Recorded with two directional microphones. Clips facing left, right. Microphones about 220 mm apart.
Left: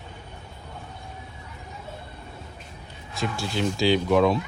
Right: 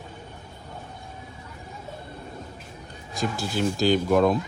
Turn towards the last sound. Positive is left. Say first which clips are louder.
# even
turn(degrees=0)  # may be behind; listen again after turning